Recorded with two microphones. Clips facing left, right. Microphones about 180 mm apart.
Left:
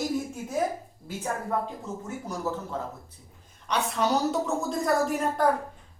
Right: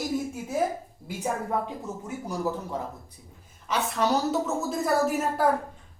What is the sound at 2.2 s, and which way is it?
Speech, 15° right (ahead or behind).